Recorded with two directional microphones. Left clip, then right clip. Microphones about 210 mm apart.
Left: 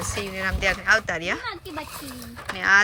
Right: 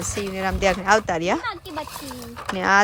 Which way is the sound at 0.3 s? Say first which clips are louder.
Right 3 dB; 20° right (ahead or behind).